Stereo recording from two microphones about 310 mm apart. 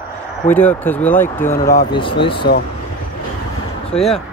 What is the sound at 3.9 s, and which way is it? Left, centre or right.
Speech, centre.